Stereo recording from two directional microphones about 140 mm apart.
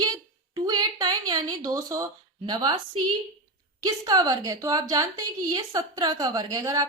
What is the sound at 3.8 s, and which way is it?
Speech, 25° right (ahead or behind).